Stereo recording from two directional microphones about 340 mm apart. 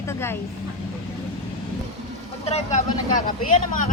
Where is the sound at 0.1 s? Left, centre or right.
Centre.